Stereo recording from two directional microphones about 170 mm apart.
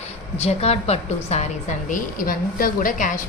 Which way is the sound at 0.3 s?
40° left (ahead or behind).